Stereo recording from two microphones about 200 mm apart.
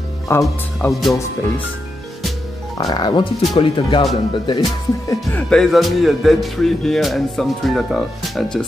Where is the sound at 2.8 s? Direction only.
20° left (ahead or behind).